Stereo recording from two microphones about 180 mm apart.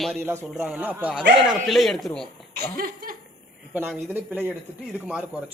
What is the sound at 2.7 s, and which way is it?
Laughter, 50° right (ahead or behind).